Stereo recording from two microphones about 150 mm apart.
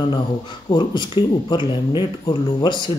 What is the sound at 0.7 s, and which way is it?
Speech, 30° left (ahead or behind).